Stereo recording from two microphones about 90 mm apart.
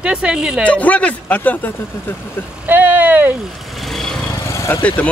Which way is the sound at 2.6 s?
20° right (ahead or behind).